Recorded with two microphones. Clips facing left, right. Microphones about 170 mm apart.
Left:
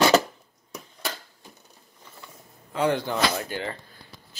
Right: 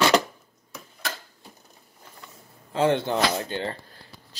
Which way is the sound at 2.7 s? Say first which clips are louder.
Right 2 dB; 25° right (ahead or behind).